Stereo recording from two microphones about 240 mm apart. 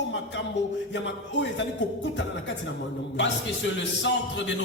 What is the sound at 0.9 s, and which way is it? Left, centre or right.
Music, left.